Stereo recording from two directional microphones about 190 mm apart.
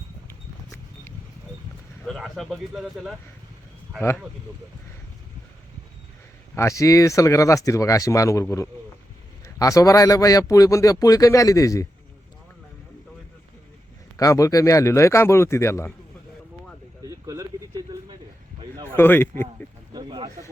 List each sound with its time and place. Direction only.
2.0 s speech: centre (ahead or behind)
6.6 s speech: 15° left (ahead or behind)
14.2 s speech: 15° left (ahead or behind)
17.0 s a sound: 15° right (ahead or behind)
18.9 s speech: 10° left (ahead or behind)
19.9 s a sound: 25° right (ahead or behind)